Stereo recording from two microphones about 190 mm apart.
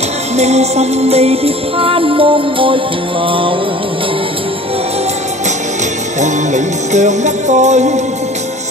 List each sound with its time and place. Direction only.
0.4 s music: 35° right (ahead or behind)
6.2 s music: 40° right (ahead or behind)